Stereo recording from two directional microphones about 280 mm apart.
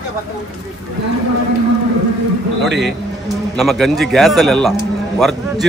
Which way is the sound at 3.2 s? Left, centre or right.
Centre.